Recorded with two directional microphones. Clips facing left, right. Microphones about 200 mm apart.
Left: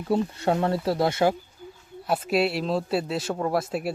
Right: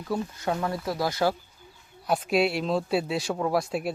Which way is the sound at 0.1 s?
30° left (ahead or behind).